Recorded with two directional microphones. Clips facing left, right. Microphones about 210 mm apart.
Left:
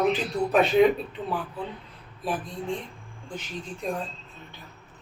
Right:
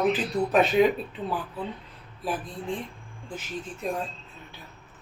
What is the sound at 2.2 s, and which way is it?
Speech, centre (ahead or behind).